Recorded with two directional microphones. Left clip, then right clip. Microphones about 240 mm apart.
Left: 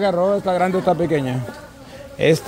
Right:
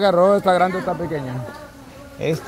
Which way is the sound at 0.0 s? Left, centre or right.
Centre.